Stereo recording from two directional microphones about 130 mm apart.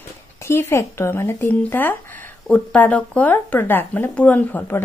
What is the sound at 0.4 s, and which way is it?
Speech, 20° left (ahead or behind).